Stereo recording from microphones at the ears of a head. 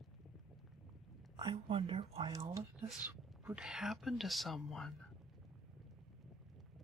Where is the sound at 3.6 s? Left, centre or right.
Centre.